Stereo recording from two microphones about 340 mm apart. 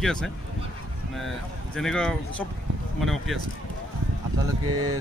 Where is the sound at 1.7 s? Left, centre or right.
Centre.